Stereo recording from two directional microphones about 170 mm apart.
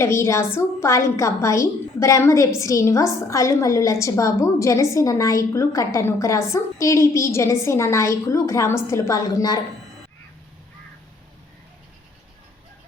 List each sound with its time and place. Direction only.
0.0 s a woman's voice: 15° left (ahead or behind)